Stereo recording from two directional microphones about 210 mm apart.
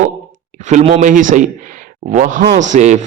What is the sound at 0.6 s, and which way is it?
A man's voice, 35° right (ahead or behind).